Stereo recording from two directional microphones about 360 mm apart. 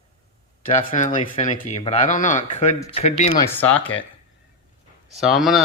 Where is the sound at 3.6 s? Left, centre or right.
Centre.